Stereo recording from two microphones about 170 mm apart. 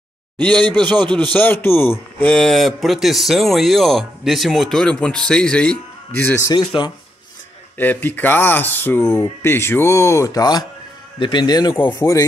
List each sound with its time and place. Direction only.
1.0 s a man's voice: 5° left (ahead or behind)
6.5 s speech: 30° left (ahead or behind)
7.7 s speech: 10° left (ahead or behind)